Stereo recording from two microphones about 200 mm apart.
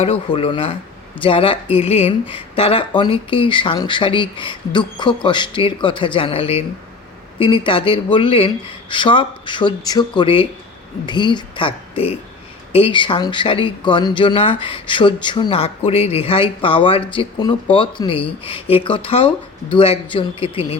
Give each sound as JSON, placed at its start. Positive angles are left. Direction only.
{"t": 0.0, "sound": "speech", "side_deg": 30}